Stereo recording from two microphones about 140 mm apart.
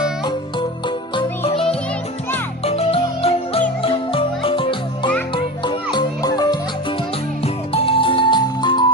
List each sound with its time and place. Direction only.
2.6 s music: 45° left (ahead or behind); by 6.6 s 30° left (ahead or behind)
7.7 s music: 40° left (ahead or behind)